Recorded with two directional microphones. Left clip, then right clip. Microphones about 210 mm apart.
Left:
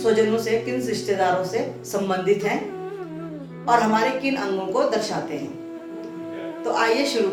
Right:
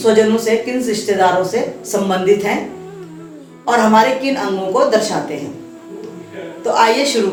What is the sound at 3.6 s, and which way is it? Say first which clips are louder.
Speech: right 7 dB; 15° left (ahead or behind).